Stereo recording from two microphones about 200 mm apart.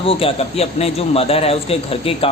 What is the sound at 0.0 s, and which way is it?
A man's voice, 30° left (ahead or behind).